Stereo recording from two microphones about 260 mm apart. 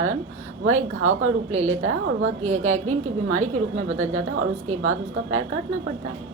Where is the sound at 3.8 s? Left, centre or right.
Right.